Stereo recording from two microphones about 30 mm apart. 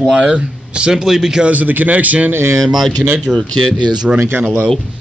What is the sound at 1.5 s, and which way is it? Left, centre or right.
Speech, right.